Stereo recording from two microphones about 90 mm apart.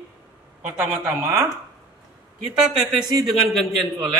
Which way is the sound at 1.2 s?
30° right (ahead or behind).